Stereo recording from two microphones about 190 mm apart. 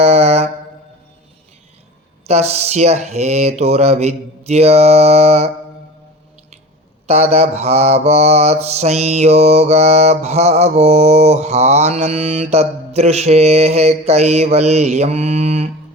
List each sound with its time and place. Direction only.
0.0 s a sound: 35° right (ahead or behind)
2.2 s mantra: 35° right (ahead or behind)
7.1 s mantra: 35° right (ahead or behind)